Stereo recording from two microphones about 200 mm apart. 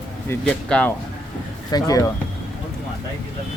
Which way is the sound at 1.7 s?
20° left (ahead or behind).